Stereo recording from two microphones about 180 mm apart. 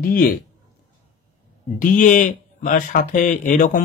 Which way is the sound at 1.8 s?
45° left (ahead or behind).